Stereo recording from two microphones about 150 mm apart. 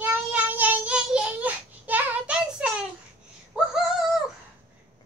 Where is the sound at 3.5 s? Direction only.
5° right (ahead or behind).